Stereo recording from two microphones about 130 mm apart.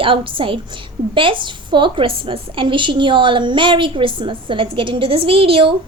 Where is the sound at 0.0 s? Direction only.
40° right (ahead or behind).